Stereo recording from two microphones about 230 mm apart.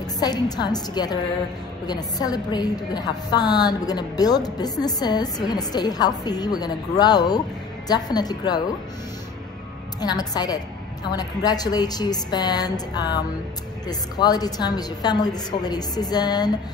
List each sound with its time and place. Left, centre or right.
0.2 s a woman's voice: centre
9.9 s a woman's voice: centre